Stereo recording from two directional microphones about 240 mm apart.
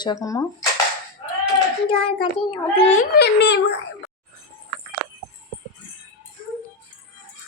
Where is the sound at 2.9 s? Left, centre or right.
Left.